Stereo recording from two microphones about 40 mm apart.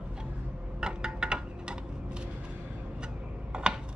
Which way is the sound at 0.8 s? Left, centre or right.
Right.